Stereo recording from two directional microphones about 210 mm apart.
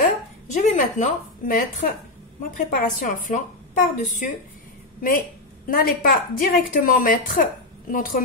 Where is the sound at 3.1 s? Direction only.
35° left (ahead or behind).